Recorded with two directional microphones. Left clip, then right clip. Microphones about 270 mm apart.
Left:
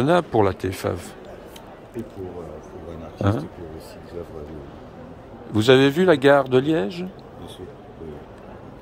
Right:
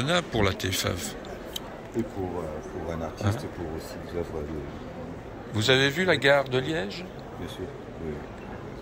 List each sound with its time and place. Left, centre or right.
0.0 s speech: left
3.2 s a man's voice: left
5.5 s a man's voice: left